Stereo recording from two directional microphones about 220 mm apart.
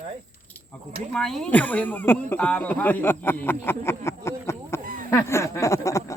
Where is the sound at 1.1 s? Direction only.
Centre (ahead or behind).